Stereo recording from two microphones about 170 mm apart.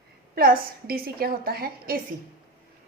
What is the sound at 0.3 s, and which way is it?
A woman's voice, 60° right (ahead or behind).